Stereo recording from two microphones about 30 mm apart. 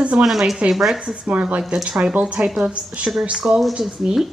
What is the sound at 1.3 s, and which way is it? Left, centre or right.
A woman's voice, right.